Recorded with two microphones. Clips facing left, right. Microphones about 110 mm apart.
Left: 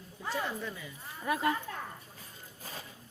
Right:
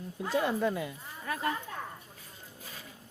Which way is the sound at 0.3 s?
60° right (ahead or behind).